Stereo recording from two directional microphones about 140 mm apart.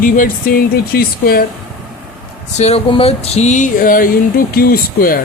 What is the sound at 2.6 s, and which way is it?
Speech, 50° left (ahead or behind).